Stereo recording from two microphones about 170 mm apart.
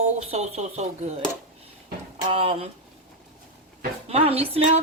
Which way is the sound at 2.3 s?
35° right (ahead or behind).